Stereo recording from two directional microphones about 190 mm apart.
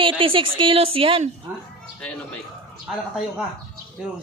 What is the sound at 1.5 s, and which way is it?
Speech, 10° right (ahead or behind).